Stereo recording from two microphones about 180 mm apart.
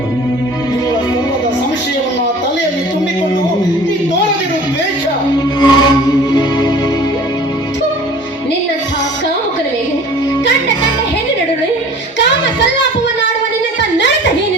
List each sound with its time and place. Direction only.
5.5 s music: 25° left (ahead or behind)